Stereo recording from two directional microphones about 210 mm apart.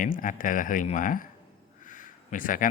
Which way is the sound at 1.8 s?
40° left (ahead or behind).